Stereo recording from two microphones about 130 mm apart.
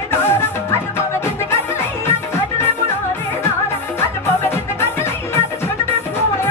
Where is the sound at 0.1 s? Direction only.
15° left (ahead or behind).